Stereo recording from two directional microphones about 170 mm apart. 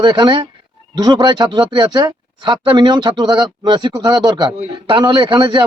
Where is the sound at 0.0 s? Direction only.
25° right (ahead or behind).